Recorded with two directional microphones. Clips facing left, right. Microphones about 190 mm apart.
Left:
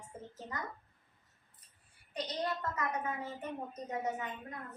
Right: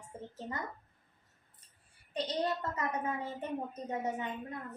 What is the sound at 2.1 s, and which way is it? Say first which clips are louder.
Child singing: right 3 dB; 30° right (ahead or behind).